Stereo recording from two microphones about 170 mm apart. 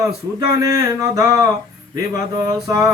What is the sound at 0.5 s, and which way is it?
Mantra, 20° right (ahead or behind).